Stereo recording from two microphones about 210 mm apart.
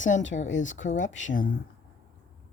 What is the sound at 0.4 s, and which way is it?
Speech, 65° left (ahead or behind).